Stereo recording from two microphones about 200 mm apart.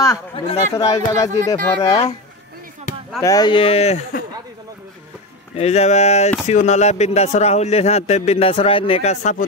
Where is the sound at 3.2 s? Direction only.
20° left (ahead or behind).